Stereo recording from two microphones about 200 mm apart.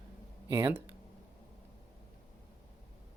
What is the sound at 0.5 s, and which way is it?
Speech, 10° right (ahead or behind).